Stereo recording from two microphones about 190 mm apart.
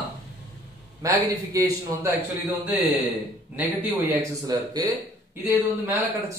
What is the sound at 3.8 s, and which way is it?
A man's voice, 15° right (ahead or behind).